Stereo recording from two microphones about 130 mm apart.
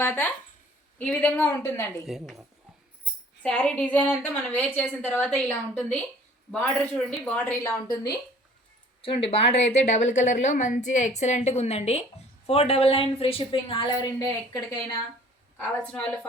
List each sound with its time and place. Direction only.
0.0 s a woman's voice: 15° left (ahead or behind)
1.5 s speech: 20° left (ahead or behind)
2.0 s speech: centre (ahead or behind)
3.4 s a woman's voice: 10° left (ahead or behind)
7.3 s a woman's voice: 10° left (ahead or behind)
7.6 s speech: 25° left (ahead or behind)
9.0 s a woman's voice: 45° left (ahead or behind); by 14.8 s 30° left (ahead or behind)
15.5 s a woman's voice: 10° left (ahead or behind)